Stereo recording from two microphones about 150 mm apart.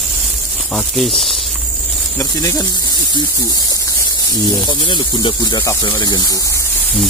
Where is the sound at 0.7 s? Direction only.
Centre (ahead or behind).